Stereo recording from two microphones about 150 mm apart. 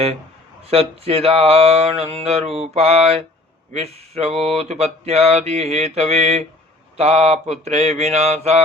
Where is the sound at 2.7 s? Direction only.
45° right (ahead or behind).